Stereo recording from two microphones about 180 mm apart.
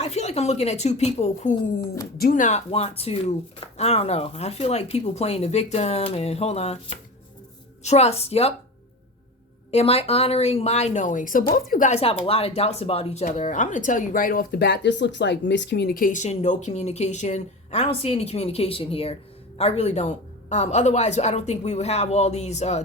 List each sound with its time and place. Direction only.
0.0 s speech: 35° left (ahead or behind)
9.7 s speech: 35° left (ahead or behind)